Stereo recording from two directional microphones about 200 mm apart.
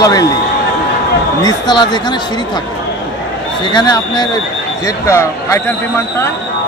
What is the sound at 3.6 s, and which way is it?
Speech, 20° left (ahead or behind).